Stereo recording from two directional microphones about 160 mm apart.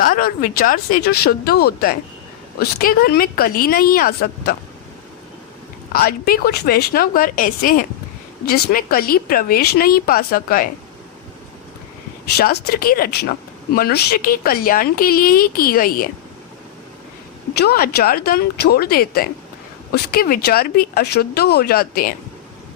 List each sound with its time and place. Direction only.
0.0 s a woman's voice: 60° left (ahead or behind)
5.9 s a woman's voice: 70° left (ahead or behind)
8.4 s a woman's voice: 75° left (ahead or behind)
12.4 s a woman's voice: 75° left (ahead or behind)
17.6 s a woman's voice: 75° left (ahead or behind)